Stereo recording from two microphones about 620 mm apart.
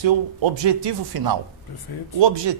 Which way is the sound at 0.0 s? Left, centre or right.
Right.